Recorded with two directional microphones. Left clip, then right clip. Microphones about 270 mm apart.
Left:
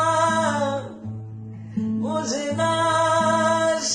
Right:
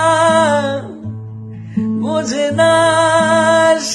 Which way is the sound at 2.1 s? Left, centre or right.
Right.